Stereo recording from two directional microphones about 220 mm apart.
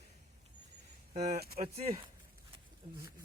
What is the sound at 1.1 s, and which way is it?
Speech, 40° right (ahead or behind).